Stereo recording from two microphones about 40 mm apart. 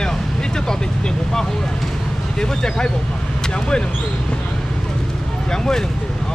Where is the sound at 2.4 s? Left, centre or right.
Centre.